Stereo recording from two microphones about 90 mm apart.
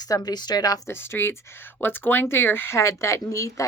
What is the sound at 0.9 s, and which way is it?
A woman's voice, 25° left (ahead or behind).